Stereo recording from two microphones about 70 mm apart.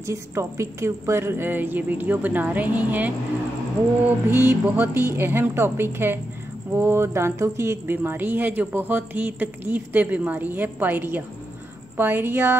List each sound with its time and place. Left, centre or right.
0.0 s speech: right
4.3 s a woman's voice: right